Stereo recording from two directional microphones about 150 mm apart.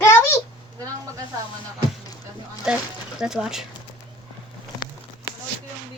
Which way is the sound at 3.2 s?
5° right (ahead or behind).